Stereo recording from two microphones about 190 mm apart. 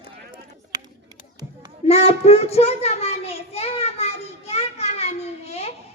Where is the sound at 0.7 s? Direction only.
20° right (ahead or behind).